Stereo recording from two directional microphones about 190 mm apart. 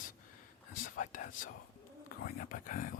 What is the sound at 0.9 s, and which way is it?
Whispering, 45° left (ahead or behind).